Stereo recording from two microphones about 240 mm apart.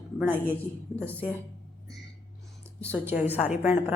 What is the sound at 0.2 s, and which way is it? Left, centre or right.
A woman's voice, centre.